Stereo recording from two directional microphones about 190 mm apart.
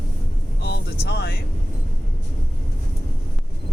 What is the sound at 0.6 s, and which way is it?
Speech, 55° left (ahead or behind).